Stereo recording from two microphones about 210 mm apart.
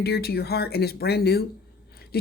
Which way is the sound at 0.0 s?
50° left (ahead or behind).